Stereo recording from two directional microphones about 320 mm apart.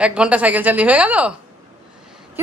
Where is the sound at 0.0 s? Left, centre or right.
Centre.